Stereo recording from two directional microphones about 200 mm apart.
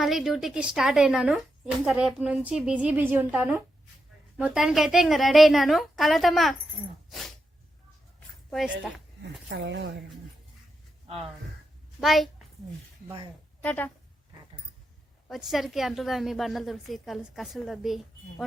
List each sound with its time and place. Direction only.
0.0 s a woman's voice: centre (ahead or behind)
7.1 s dog: centre (ahead or behind)
8.4 s a woman's voice: centre (ahead or behind)
9.5 s speech: 65° right (ahead or behind)
11.9 s a woman's voice: centre (ahead or behind)
13.6 s a woman's voice: 5° left (ahead or behind)
15.3 s a woman's voice: centre (ahead or behind)